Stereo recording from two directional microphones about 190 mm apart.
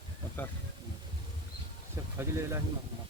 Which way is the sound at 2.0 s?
15° right (ahead or behind).